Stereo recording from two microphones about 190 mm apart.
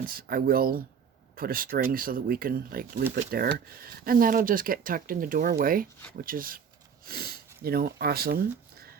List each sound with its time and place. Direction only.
0.0 s speech: 50° right (ahead or behind)